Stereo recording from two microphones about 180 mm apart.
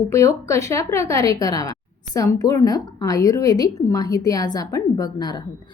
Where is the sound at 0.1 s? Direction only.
15° left (ahead or behind).